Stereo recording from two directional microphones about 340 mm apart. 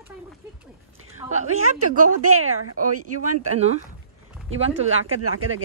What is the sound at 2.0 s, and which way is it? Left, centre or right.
Speech, right.